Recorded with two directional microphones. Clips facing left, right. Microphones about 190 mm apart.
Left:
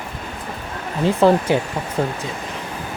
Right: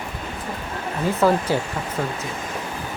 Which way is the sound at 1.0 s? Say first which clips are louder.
Left 4 dB; 25° left (ahead or behind).